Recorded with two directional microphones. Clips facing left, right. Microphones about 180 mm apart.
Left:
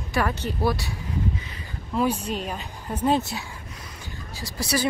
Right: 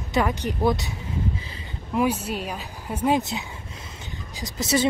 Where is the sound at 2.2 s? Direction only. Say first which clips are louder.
Even; 5° right (ahead or behind).